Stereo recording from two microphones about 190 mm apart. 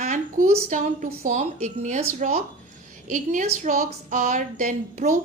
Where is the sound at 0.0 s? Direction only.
45° right (ahead or behind).